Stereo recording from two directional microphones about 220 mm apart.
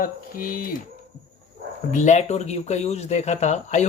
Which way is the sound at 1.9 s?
35° left (ahead or behind).